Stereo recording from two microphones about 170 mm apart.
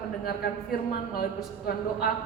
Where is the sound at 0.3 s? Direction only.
60° left (ahead or behind).